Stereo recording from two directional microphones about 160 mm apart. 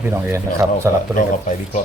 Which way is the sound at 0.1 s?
15° right (ahead or behind).